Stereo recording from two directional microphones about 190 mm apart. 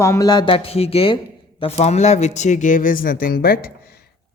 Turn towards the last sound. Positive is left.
turn(degrees=55)  # may be behind; listen again after turning